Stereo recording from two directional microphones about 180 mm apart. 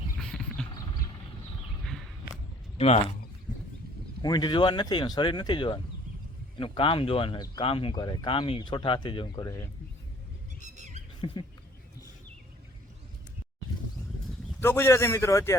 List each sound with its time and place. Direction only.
0.2 s wild animals: 5° left (ahead or behind)
1.9 s a sound: centre (ahead or behind)
2.7 s speech: 35° left (ahead or behind)
4.2 s speech: 25° left (ahead or behind)
10.6 s a sound: 40° right (ahead or behind)
11.2 s speech: 25° left (ahead or behind)
14.6 s a man's voice: 15° left (ahead or behind)